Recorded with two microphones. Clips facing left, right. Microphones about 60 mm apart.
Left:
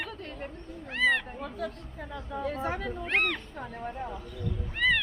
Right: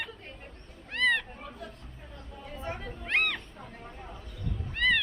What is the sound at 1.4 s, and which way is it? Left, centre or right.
Speech, left.